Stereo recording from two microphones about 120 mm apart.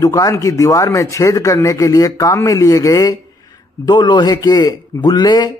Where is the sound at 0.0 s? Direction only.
30° left (ahead or behind).